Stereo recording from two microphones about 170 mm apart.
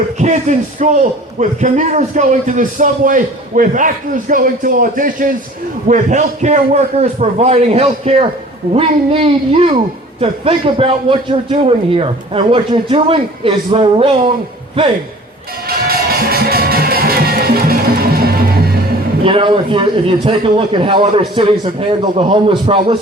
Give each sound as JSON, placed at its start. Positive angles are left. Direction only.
{"t": 0.2, "sound": "a man's voice", "side_deg": -45}
{"t": 15.6, "sound": "music", "side_deg": -65}
{"t": 19.2, "sound": "a man's voice", "side_deg": -30}